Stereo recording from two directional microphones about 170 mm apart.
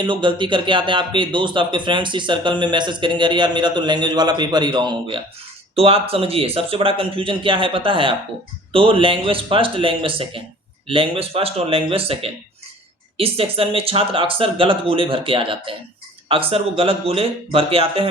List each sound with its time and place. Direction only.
0.0 s speech: 30° right (ahead or behind)